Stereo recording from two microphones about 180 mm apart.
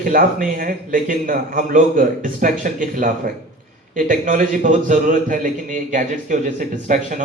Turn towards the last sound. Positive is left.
turn(degrees=-45)  # may be behind; listen again after turning